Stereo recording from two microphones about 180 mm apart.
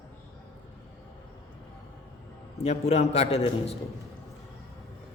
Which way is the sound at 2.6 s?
35° left (ahead or behind).